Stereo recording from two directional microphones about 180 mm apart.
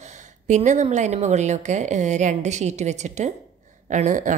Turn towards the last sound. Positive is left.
turn(degrees=-45)  # may be behind; listen again after turning